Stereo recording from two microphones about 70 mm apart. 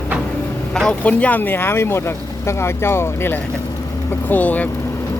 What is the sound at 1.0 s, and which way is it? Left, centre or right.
Speech, left.